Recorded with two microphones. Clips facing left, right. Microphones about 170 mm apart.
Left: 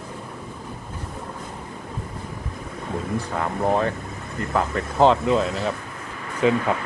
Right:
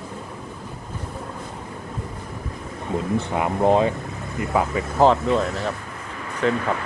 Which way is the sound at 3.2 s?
20° right (ahead or behind).